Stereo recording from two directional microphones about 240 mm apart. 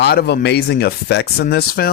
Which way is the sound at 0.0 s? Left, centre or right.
Left.